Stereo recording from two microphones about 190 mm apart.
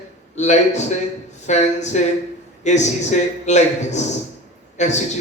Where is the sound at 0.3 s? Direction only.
35° left (ahead or behind).